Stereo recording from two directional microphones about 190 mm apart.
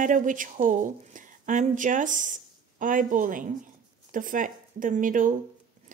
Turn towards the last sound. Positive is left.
turn(degrees=-45)  # may be behind; listen again after turning